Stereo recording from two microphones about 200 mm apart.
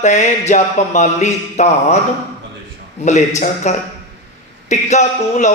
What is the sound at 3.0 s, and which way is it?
Speech, 35° left (ahead or behind).